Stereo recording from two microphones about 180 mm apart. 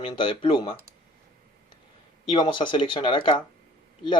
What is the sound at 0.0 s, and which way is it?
Speech, 30° left (ahead or behind).